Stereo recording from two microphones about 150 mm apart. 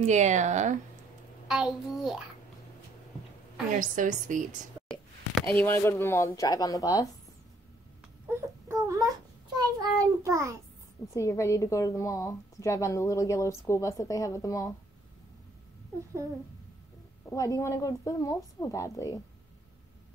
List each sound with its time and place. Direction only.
0.0 s a woman's voice: 50° right (ahead or behind)
1.5 s a child's voice: 5° right (ahead or behind)
3.8 s a woman's voice: 60° right (ahead or behind)
5.3 s speech: centre (ahead or behind)
5.7 s a woman's voice: 15° left (ahead or behind)
8.3 s baby cry: 20° right (ahead or behind)
9.8 s a child's voice: 20° right (ahead or behind)
11.1 s a woman's voice: 20° left (ahead or behind)
17.3 s a woman's voice: 20° left (ahead or behind)